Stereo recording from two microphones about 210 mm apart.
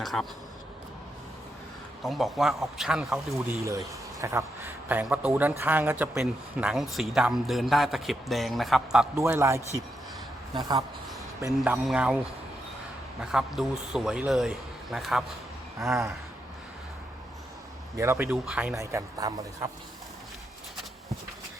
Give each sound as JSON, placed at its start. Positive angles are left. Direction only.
{"t": 0.0, "sound": "a man's voice", "side_deg": 0}
{"t": 2.0, "sound": "a man's voice", "side_deg": 0}
{"t": 3.6, "sound": "a man's voice", "side_deg": -15}
{"t": 9.1, "sound": "speech", "side_deg": -15}
{"t": 13.3, "sound": "a man's voice", "side_deg": 0}
{"t": 17.9, "sound": "speech", "side_deg": -10}